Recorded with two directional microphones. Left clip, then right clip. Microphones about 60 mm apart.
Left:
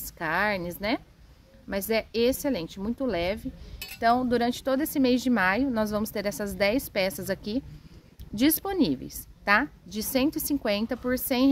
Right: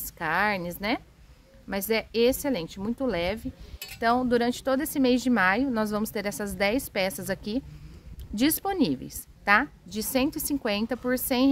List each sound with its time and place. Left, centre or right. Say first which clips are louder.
0.0 s a woman's voice: right 1 dB; right